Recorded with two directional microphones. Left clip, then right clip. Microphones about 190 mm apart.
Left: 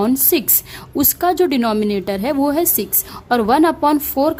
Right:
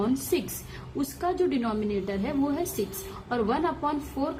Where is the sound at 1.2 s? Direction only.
55° left (ahead or behind).